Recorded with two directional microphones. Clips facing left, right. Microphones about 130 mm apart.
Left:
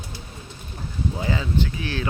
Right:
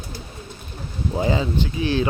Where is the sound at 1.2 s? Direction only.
25° right (ahead or behind).